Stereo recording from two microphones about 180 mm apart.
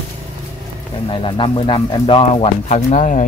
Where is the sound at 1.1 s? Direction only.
30° left (ahead or behind).